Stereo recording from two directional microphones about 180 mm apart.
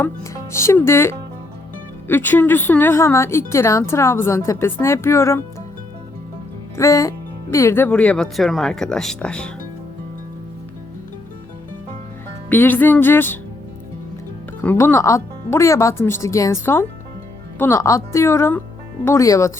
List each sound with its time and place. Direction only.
0.0 s a woman's voice: 15° left (ahead or behind)
6.7 s a woman's voice: 15° left (ahead or behind)
12.5 s a woman's voice: 10° left (ahead or behind)
14.6 s a woman's voice: 10° left (ahead or behind)